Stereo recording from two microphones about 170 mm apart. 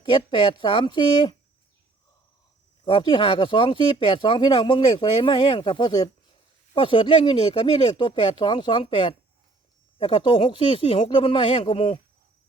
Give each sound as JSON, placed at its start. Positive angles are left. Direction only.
{"t": 0.0, "sound": "speech", "side_deg": 30}
{"t": 2.8, "sound": "speech", "side_deg": 30}